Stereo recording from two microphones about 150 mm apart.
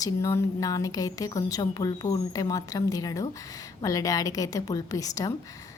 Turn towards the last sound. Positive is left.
turn(degrees=25)  # may be behind; listen again after turning